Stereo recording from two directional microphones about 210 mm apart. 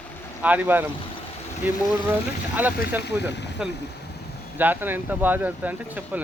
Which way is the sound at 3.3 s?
55° left (ahead or behind).